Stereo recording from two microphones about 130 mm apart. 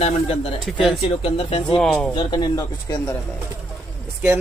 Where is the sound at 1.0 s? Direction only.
45° left (ahead or behind).